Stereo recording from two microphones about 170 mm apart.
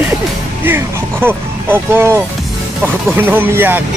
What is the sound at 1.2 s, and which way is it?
Speech, 15° right (ahead or behind).